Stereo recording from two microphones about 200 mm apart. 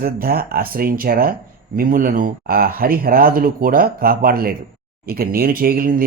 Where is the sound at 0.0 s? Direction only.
50° right (ahead or behind).